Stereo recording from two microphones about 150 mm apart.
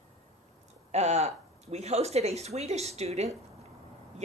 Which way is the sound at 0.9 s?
45° right (ahead or behind).